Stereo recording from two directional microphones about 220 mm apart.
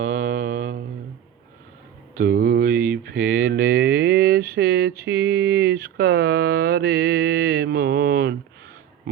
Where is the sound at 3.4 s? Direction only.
45° right (ahead or behind).